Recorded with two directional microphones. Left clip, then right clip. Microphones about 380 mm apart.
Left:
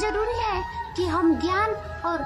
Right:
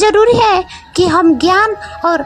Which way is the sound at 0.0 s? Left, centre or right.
Right.